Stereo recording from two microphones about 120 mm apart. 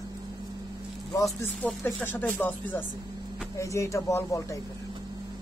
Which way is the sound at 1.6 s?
15° left (ahead or behind).